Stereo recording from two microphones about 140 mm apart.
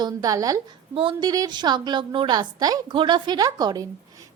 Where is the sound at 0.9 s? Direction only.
40° right (ahead or behind).